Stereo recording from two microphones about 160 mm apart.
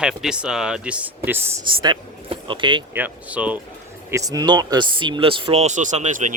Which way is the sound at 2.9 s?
10° right (ahead or behind).